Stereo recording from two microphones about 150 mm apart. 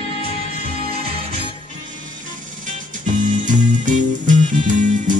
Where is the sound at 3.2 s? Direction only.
60° right (ahead or behind).